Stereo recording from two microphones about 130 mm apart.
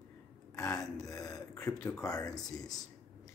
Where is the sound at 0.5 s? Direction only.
25° left (ahead or behind).